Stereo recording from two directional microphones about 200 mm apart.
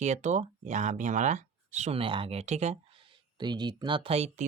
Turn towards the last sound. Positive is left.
turn(degrees=-30)  # may be behind; listen again after turning